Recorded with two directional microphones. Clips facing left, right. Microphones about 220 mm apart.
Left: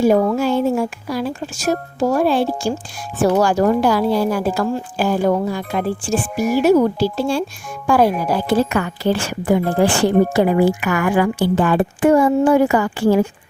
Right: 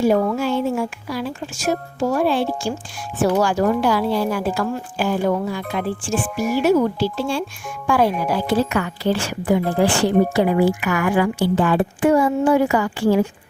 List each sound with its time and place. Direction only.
0.0 s a woman's voice: 45° left (ahead or behind)